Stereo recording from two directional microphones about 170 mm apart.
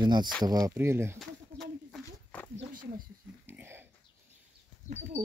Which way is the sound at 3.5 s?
15° right (ahead or behind).